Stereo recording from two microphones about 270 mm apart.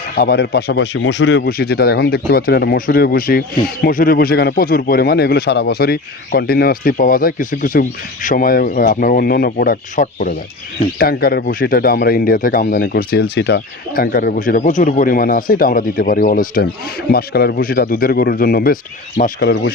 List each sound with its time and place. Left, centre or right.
0.2 s speech: left